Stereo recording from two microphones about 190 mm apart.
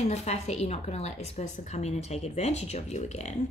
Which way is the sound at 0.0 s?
35° left (ahead or behind).